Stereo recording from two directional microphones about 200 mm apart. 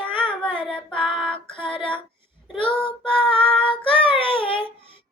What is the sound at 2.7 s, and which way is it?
Child singing, 5° left (ahead or behind).